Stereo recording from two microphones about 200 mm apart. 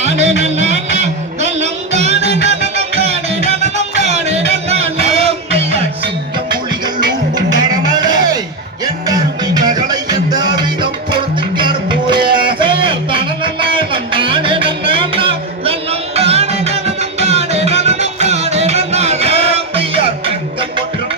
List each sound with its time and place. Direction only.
0.0 s music: 35° right (ahead or behind)